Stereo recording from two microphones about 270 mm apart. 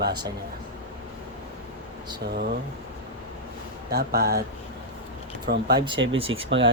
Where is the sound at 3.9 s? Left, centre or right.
Right.